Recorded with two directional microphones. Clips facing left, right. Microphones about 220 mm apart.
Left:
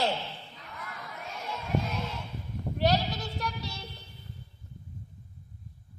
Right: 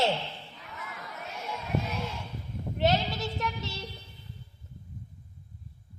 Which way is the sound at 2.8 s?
25° right (ahead or behind).